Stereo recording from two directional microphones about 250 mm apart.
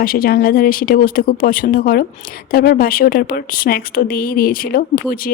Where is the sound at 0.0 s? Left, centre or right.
Left.